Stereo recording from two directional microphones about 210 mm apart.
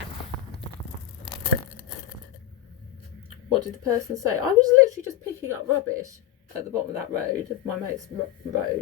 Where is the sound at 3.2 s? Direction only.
15° right (ahead or behind).